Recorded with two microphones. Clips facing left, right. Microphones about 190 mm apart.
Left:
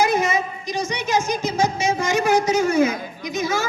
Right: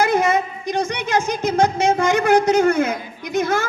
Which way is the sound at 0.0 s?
55° right (ahead or behind).